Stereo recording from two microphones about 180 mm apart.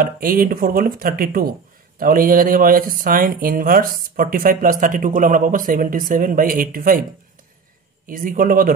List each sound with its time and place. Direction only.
0.0 s speech: 50° right (ahead or behind)
8.1 s speech: 50° right (ahead or behind)